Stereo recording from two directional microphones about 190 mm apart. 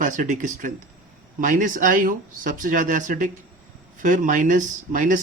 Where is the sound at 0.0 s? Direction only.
45° right (ahead or behind).